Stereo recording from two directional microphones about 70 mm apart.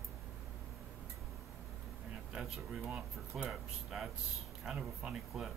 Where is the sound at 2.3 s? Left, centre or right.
Centre.